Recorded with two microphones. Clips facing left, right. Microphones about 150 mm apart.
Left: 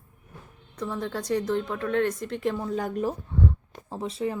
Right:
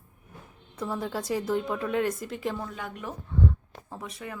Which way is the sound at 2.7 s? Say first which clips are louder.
Left 10 dB; 40° left (ahead or behind).